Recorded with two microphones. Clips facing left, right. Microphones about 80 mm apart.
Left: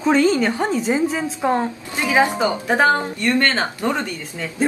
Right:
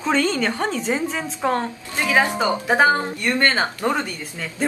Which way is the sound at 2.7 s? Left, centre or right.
Centre.